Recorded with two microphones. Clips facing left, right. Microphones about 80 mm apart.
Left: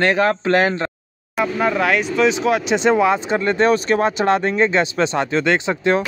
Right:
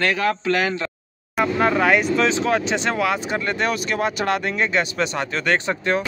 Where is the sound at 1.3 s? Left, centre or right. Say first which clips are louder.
Even; centre.